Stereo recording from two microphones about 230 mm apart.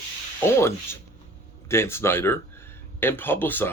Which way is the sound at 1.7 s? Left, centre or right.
Centre.